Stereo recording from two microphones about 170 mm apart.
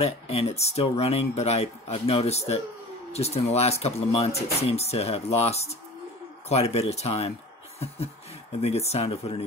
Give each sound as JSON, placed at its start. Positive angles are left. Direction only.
{"t": 0.0, "sound": "speech", "side_deg": 35}